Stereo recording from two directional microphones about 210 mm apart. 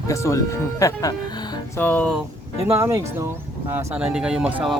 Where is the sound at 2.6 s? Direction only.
10° right (ahead or behind).